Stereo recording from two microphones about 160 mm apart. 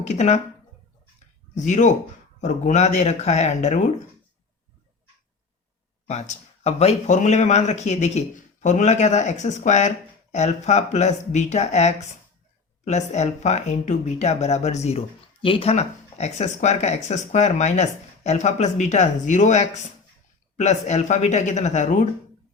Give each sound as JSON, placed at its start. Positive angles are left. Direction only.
{"t": 0.0, "sound": "speech", "side_deg": 45}
{"t": 1.5, "sound": "speech", "side_deg": 50}
{"t": 6.1, "sound": "speech", "side_deg": 45}